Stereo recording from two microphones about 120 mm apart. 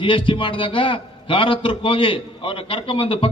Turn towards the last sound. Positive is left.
turn(degrees=50)  # may be behind; listen again after turning